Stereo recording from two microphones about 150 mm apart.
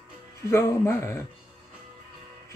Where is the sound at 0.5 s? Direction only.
15° left (ahead or behind).